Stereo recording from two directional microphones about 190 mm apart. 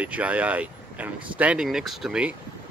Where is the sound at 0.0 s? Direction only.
5° right (ahead or behind).